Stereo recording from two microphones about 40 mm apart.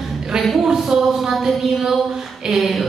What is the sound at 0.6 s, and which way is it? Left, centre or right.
A woman's voice, centre.